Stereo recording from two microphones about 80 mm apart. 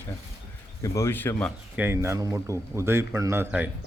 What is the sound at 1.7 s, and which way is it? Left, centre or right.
Speech, right.